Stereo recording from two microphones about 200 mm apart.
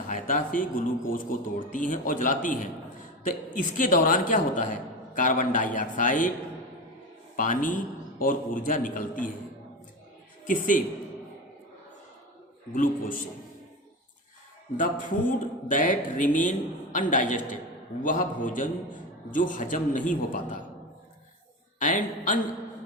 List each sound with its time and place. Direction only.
0.1 s a sound: 40° left (ahead or behind)
1.0 s speech: 45° left (ahead or behind)
7.3 s a man's voice: 40° left (ahead or behind)
10.4 s speech: 40° left (ahead or behind)
12.7 s a man's voice: 45° left (ahead or behind)
14.8 s speech: 40° left (ahead or behind)
21.8 s a woman's voice: 40° left (ahead or behind)